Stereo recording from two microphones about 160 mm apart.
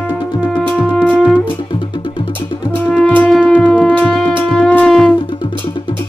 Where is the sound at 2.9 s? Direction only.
5° left (ahead or behind).